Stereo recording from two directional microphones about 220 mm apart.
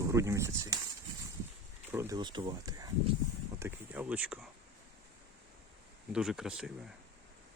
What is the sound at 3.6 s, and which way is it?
Speech, 10° right (ahead or behind).